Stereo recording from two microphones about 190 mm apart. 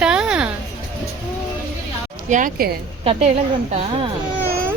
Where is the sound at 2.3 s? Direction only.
45° right (ahead or behind).